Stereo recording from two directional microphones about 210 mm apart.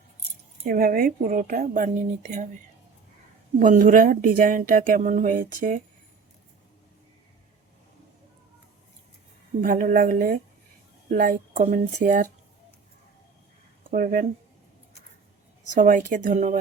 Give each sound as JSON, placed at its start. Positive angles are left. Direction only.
{"t": 0.6, "sound": "speech", "side_deg": -45}
{"t": 3.6, "sound": "speech", "side_deg": -40}
{"t": 9.6, "sound": "speech", "side_deg": -40}
{"t": 13.9, "sound": "speech", "side_deg": -45}
{"t": 15.8, "sound": "speech", "side_deg": -40}